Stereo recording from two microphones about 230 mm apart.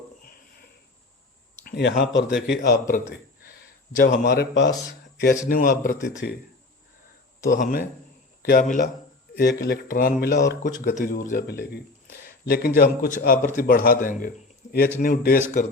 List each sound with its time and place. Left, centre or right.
0.3 s a sound: left
1.6 s speech: left
3.4 s a sound: left
4.1 s a man's voice: left
5.5 s speech: left
7.4 s speech: left